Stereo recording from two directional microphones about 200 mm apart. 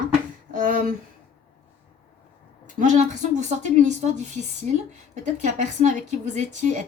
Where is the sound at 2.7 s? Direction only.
40° right (ahead or behind).